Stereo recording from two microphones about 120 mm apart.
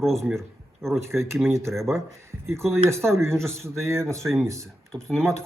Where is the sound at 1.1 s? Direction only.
20° right (ahead or behind).